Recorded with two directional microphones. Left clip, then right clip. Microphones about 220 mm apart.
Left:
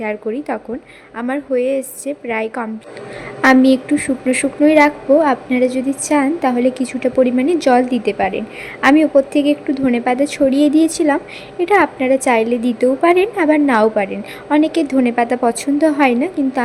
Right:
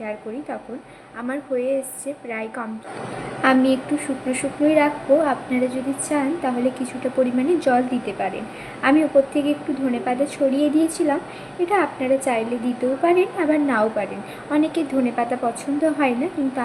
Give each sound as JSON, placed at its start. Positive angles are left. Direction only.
{"t": 0.0, "sound": "a woman's voice", "side_deg": 50}